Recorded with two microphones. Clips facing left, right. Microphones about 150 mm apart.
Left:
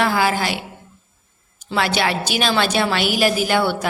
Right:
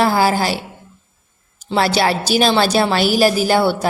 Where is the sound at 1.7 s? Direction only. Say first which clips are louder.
Right 4 dB; 35° right (ahead or behind).